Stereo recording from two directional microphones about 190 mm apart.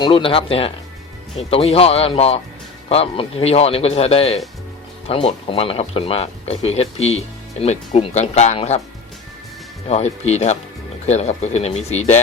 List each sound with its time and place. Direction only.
0.0 s speech: 25° left (ahead or behind)
9.9 s speech: 35° left (ahead or behind)